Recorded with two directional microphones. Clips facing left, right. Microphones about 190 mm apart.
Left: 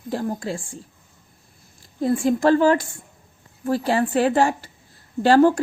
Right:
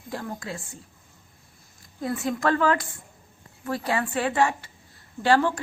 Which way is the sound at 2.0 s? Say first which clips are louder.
Left 8 dB; 30° left (ahead or behind).